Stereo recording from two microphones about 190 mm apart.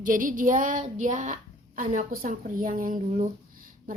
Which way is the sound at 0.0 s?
45° right (ahead or behind).